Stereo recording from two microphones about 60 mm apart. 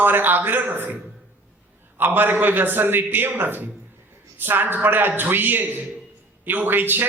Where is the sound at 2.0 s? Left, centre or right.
Right.